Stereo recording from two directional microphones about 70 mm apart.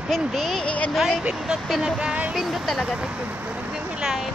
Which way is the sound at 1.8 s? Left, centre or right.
Centre.